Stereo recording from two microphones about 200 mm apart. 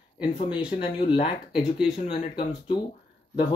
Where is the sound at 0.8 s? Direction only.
25° left (ahead or behind).